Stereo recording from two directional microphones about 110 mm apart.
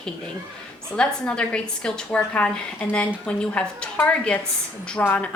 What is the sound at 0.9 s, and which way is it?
A woman's voice, 10° left (ahead or behind).